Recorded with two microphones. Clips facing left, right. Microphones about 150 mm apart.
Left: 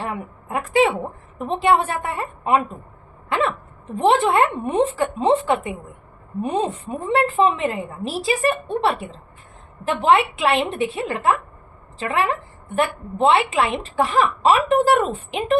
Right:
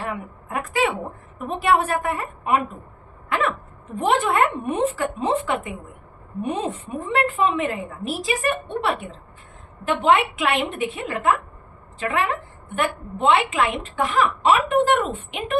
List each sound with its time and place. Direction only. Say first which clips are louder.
0.0 s a woman's voice: left 1 dB; 30° left (ahead or behind)
3.2 s hiccup: left 2 dB; 30° left (ahead or behind)
3.9 s a woman's voice: left 3 dB; 30° left (ahead or behind)